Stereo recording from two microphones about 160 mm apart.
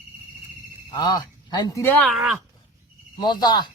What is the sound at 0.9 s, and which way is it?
Speech, 25° left (ahead or behind).